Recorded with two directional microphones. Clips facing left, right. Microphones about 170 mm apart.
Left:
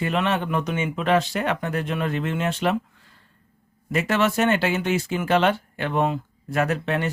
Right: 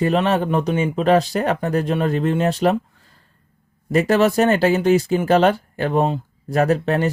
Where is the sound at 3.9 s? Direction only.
35° right (ahead or behind).